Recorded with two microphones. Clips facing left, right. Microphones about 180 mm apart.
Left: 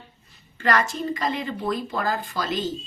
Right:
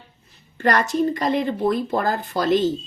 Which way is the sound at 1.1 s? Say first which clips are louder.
Right 5 dB; 55° right (ahead or behind).